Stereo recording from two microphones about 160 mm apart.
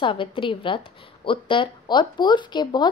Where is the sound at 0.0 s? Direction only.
30° left (ahead or behind).